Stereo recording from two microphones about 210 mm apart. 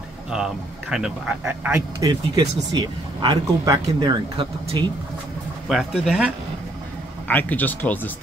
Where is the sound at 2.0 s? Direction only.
20° right (ahead or behind).